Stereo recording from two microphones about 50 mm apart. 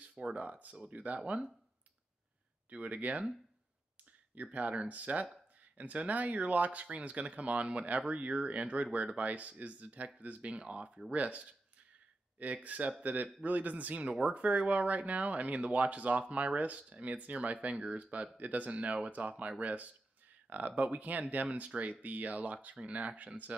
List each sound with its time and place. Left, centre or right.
0.0 s speech: right
2.7 s speech: right
4.4 s speech: right